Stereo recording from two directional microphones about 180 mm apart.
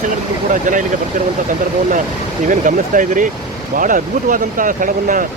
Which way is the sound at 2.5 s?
50° right (ahead or behind).